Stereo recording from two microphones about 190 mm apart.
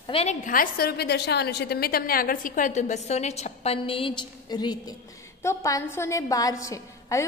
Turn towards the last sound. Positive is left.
turn(degrees=15)  # may be behind; listen again after turning